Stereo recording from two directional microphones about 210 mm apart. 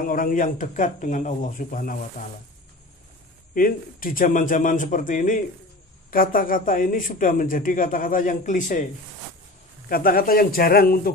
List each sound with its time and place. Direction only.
0.0 s a man's voice: 40° left (ahead or behind)
3.5 s a man's voice: 40° left (ahead or behind)
9.8 s speech: 45° left (ahead or behind)